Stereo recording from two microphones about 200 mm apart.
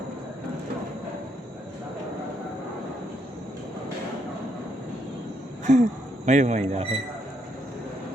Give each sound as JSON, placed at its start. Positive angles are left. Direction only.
{"t": 5.6, "sound": "speech", "side_deg": -35}